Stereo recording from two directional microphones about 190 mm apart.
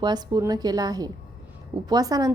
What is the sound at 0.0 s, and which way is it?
Speech, 20° right (ahead or behind).